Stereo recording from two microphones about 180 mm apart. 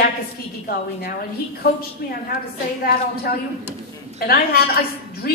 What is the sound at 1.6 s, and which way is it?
Speech, 60° left (ahead or behind).